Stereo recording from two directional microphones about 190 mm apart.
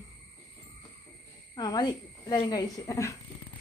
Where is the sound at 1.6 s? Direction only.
20° left (ahead or behind).